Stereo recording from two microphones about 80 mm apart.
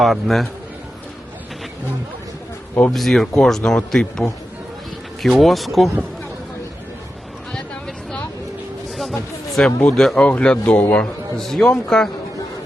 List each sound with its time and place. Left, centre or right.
0.0 s speech: centre
2.9 s speech: centre
7.5 s a sound: centre
9.9 s speech: centre
10.2 s a man's voice: centre